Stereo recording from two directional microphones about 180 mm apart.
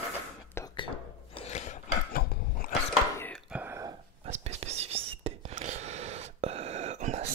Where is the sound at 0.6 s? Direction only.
15° left (ahead or behind).